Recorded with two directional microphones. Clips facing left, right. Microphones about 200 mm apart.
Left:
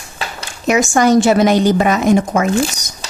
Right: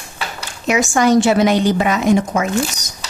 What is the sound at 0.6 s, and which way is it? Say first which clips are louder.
A woman's voice: left 2 dB; 45° left (ahead or behind).